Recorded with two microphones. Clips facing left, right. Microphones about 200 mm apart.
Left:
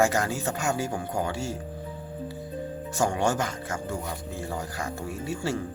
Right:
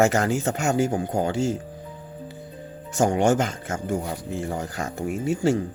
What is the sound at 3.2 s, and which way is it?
Speech, 20° right (ahead or behind).